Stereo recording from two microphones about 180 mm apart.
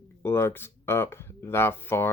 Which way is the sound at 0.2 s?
15° left (ahead or behind).